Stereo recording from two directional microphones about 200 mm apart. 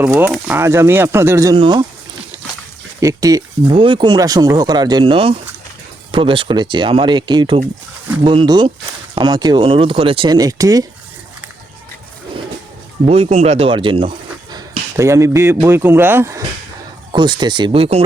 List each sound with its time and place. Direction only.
0.0 s speech: 10° right (ahead or behind)
3.0 s speech: 15° right (ahead or behind)
13.1 s speech: 30° right (ahead or behind)
14.9 s speech: 15° right (ahead or behind)
17.1 s speech: 25° right (ahead or behind)